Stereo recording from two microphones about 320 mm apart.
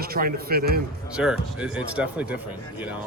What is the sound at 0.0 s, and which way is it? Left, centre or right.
Speech, right.